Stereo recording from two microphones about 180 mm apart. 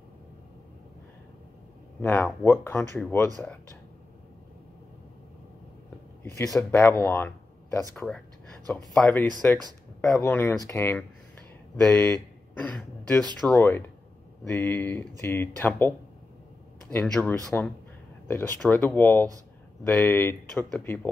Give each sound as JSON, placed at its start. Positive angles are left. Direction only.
{"t": 2.0, "sound": "speech", "side_deg": 10}
{"t": 6.2, "sound": "speech", "side_deg": 15}
{"t": 16.9, "sound": "speech", "side_deg": 5}